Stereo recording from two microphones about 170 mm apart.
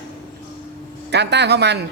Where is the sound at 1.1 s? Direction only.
85° right.